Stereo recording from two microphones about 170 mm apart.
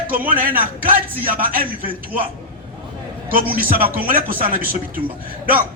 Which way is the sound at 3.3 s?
55° right (ahead or behind).